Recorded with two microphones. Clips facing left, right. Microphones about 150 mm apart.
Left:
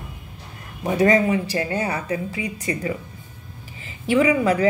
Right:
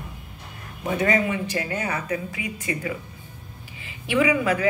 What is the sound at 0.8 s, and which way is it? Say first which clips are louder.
A woman's voice: left 5 dB; 35° left (ahead or behind).